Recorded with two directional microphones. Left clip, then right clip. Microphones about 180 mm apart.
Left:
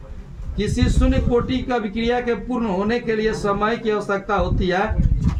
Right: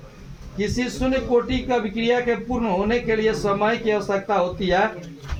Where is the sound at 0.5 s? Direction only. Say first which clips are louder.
Left 1 dB; 35° left (ahead or behind).